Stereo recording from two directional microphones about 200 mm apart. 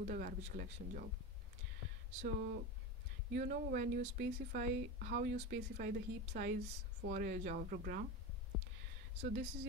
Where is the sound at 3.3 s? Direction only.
45° right (ahead or behind).